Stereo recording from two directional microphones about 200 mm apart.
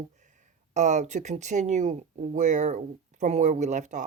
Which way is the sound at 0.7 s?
35° right (ahead or behind).